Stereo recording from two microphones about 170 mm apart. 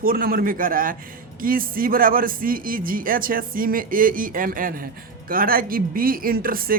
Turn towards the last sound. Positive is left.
turn(degrees=-60)  # may be behind; listen again after turning